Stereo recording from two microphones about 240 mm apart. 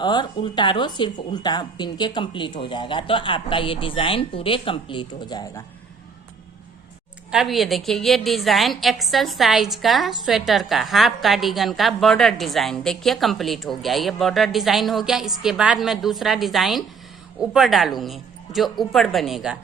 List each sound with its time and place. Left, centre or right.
0.0 s speech: centre
7.3 s a woman's voice: centre